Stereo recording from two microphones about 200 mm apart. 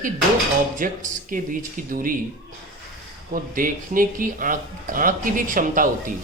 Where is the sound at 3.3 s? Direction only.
45° right (ahead or behind).